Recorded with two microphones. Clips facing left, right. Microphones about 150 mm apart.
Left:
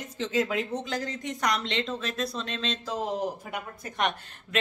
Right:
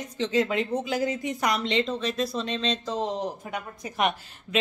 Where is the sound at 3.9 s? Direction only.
5° right (ahead or behind).